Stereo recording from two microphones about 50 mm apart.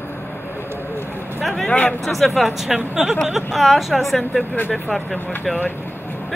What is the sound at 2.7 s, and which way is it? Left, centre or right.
Speech, centre.